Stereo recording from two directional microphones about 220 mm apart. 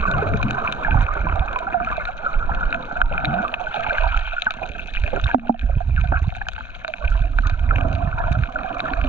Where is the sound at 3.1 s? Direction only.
10° right (ahead or behind).